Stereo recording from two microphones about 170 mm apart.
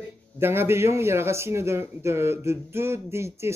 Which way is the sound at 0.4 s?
15° right (ahead or behind).